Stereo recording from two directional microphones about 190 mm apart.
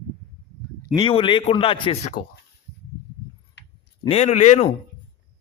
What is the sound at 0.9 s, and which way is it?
A man's voice, 25° left (ahead or behind).